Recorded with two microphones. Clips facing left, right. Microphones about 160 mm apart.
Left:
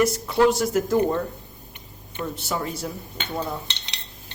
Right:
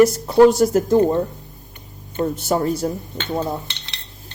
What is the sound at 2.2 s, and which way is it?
Speech, 45° right (ahead or behind).